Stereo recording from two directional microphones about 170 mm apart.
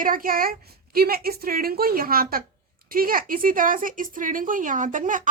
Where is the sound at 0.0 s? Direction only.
55° right (ahead or behind).